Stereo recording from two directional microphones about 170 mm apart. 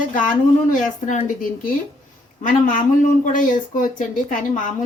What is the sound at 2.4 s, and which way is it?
Speech, 50° left (ahead or behind).